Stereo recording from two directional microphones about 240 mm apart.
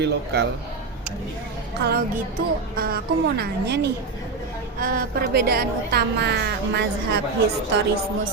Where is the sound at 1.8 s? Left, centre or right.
Right.